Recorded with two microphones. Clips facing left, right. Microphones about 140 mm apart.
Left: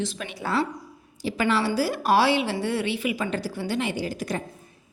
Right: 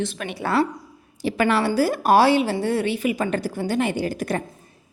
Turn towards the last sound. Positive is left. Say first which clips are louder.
# right 4 dB
turn(degrees=-55)  # may be behind; listen again after turning